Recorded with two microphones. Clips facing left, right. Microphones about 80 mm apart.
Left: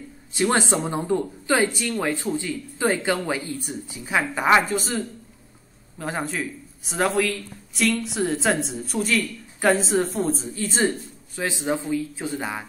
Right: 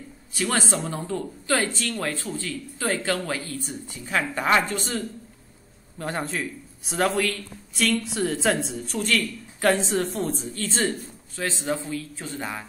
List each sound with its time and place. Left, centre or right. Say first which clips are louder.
0.3 s speech: left 4 dB; left